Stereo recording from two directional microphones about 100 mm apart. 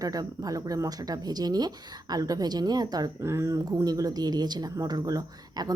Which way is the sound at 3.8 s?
40° right (ahead or behind).